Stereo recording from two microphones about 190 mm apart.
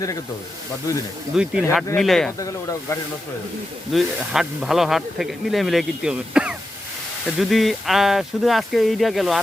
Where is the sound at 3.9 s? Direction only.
Centre (ahead or behind).